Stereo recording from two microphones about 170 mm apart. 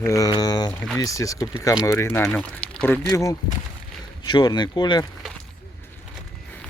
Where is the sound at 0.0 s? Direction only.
20° left (ahead or behind).